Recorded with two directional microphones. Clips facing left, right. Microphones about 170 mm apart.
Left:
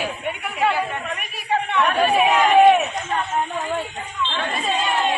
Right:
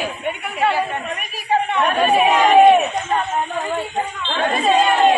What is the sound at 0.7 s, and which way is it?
Speech, 35° right (ahead or behind).